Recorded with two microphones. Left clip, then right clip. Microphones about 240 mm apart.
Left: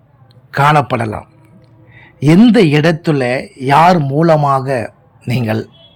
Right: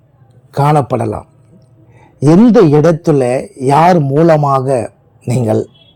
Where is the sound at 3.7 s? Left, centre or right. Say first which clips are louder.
Even; centre.